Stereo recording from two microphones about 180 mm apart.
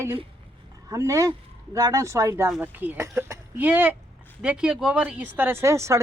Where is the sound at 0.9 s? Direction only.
15° right (ahead or behind).